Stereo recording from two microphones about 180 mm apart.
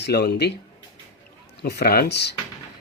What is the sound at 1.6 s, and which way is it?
Speech, 60° left (ahead or behind).